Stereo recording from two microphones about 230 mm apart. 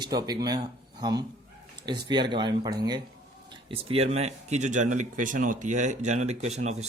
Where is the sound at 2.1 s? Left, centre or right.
Centre.